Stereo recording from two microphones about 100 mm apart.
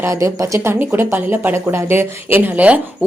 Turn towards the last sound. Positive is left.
turn(degrees=-15)  # may be behind; listen again after turning